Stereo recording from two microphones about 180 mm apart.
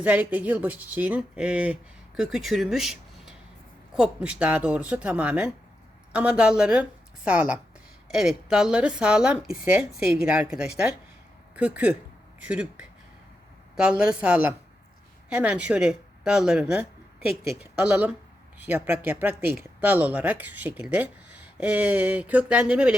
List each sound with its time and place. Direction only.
0.0 s a woman's voice: 10° right (ahead or behind)